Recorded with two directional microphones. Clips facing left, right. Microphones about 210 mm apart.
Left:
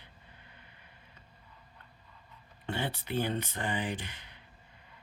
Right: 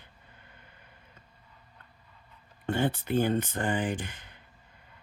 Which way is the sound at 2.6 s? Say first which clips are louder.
Right 7 dB; 50° right (ahead or behind).